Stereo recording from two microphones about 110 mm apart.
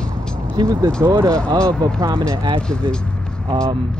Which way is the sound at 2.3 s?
50° right (ahead or behind).